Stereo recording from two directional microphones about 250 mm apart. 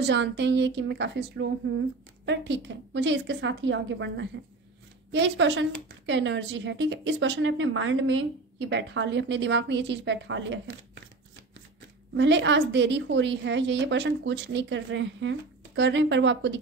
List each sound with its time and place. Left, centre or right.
0.0 s speech: right
12.2 s speech: right